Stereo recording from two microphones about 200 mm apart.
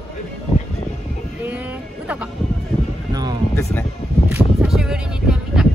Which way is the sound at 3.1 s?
20° right (ahead or behind).